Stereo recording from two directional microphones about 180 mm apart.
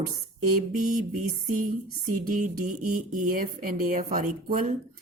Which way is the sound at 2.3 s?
50° right (ahead or behind).